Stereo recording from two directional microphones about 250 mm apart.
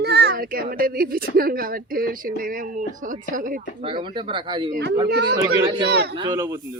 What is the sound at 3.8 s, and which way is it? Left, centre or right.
Speech, centre.